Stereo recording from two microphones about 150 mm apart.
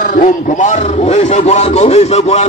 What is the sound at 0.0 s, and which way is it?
A man's voice, 65° left (ahead or behind).